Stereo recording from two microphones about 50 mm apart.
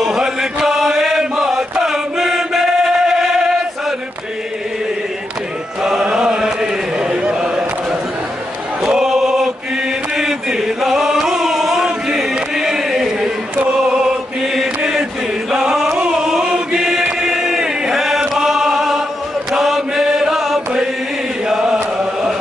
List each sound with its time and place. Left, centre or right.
0.0 s chant: centre
5.8 s chant: centre
8.8 s choir: centre
10.1 s music: centre
14.0 s mantra: centre
14.8 s chant: centre
21.5 s chant: centre